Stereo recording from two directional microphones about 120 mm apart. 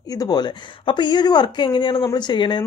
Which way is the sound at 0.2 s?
35° left (ahead or behind).